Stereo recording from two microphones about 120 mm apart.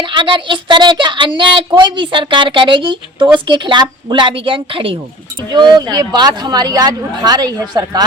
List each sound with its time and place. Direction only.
0.0 s a woman's voice: 40° right (ahead or behind)
5.5 s speech: 35° right (ahead or behind)